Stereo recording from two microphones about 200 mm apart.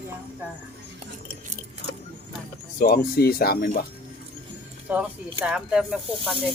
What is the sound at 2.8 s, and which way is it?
Speech, 50° left (ahead or behind).